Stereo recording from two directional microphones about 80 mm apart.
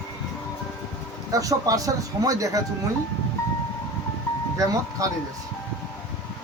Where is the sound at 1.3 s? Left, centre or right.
Right.